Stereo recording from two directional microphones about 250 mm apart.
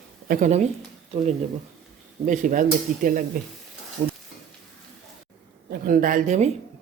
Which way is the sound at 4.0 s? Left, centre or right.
Right.